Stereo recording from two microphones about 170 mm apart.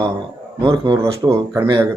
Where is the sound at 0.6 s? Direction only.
25° right (ahead or behind).